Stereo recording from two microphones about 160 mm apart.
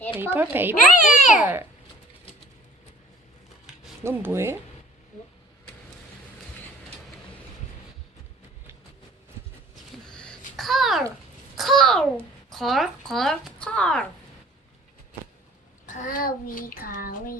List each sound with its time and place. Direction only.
0.2 s a child's voice: 10° right (ahead or behind)
3.7 s a sound: 5° right (ahead or behind)
4.0 s a child's voice: 15° right (ahead or behind)
10.1 s babbling: 5° left (ahead or behind)
11.5 s a sound: centre (ahead or behind)
12.5 s speech: centre (ahead or behind)
15.9 s child singing: 55° left (ahead or behind)